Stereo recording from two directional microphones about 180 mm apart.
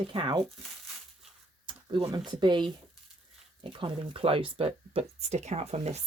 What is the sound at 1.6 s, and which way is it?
Speech, 30° right (ahead or behind).